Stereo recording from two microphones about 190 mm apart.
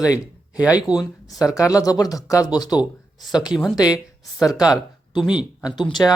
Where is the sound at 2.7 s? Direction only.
5° right (ahead or behind).